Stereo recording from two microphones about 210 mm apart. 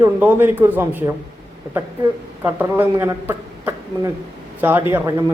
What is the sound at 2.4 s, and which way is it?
A woman's voice, 10° right (ahead or behind).